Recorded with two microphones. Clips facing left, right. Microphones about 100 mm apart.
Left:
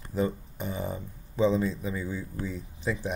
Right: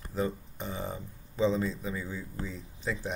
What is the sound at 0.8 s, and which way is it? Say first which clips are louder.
Speech: left 3 dB; 15° left (ahead or behind).